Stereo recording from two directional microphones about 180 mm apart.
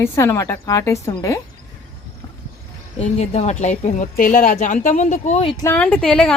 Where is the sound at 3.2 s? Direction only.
40° left (ahead or behind).